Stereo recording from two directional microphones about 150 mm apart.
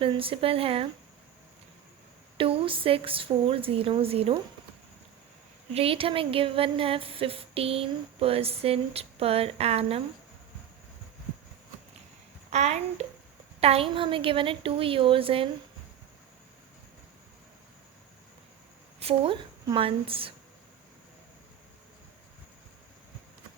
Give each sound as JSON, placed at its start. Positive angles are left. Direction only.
{"t": 0.0, "sound": "speech", "side_deg": -35}
{"t": 2.4, "sound": "speech", "side_deg": -35}
{"t": 5.7, "sound": "speech", "side_deg": -40}
{"t": 12.5, "sound": "a child's voice", "side_deg": -45}
{"t": 18.9, "sound": "speech", "side_deg": -40}